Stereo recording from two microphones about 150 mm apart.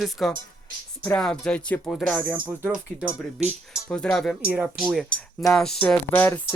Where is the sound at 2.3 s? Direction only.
10° right (ahead or behind).